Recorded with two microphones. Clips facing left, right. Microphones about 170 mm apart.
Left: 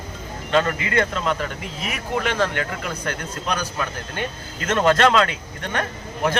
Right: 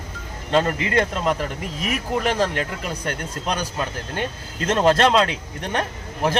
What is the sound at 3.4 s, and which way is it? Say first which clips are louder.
Speech: even; 30° right (ahead or behind).